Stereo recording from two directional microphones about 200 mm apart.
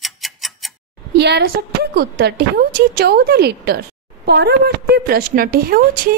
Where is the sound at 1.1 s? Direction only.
55° right (ahead or behind).